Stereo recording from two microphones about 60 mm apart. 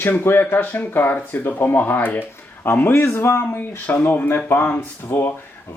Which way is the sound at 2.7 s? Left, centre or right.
Left.